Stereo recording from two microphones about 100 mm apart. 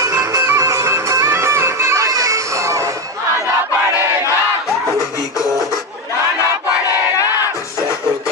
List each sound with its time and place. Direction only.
0.0 s music: 35° right (ahead or behind)